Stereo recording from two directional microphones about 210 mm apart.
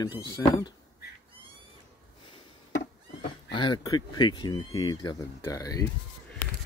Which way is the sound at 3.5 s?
20° left (ahead or behind).